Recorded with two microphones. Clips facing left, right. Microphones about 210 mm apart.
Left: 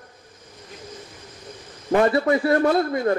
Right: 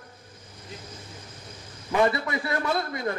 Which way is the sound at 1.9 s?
45° left (ahead or behind).